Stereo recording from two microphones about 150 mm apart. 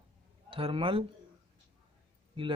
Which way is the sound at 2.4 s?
35° right (ahead or behind).